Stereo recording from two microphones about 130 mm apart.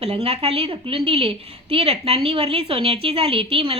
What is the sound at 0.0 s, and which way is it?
A woman's voice, 55° right (ahead or behind).